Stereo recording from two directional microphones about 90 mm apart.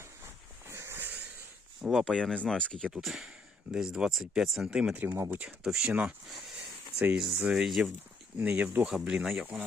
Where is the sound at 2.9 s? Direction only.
5° right (ahead or behind).